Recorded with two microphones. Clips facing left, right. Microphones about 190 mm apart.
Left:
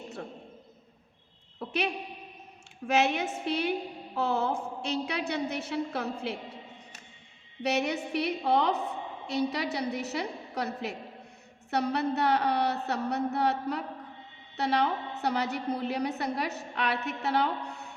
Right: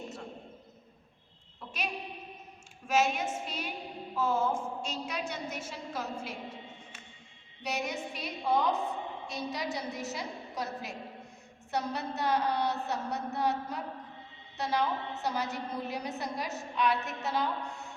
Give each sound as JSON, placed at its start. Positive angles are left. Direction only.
{"t": 1.5, "sound": "a sound", "side_deg": 65}
{"t": 2.8, "sound": "a woman's voice", "side_deg": 65}
{"t": 7.6, "sound": "a woman's voice", "side_deg": 65}